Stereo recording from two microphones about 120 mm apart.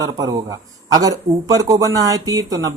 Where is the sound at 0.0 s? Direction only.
30° right (ahead or behind).